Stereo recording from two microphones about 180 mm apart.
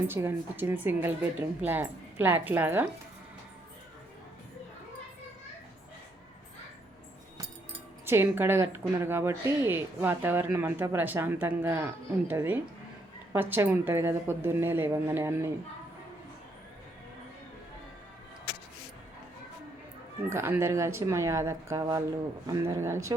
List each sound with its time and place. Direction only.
0.1 s speech: 10° right (ahead or behind)
8.0 s speech: 10° right (ahead or behind)
20.3 s speech: 15° right (ahead or behind)